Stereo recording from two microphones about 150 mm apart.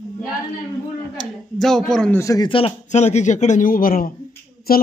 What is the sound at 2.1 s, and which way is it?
Speech, 20° left (ahead or behind).